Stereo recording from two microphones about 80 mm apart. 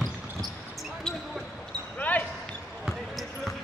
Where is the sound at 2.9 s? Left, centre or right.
Centre.